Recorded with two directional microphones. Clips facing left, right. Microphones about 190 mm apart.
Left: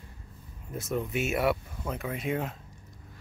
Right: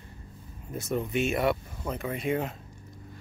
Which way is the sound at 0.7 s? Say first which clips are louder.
Right 2 dB; centre (ahead or behind).